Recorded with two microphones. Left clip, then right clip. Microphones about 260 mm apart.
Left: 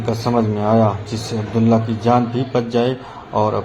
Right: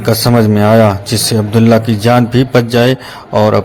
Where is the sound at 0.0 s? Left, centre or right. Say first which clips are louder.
Right 8 dB; right.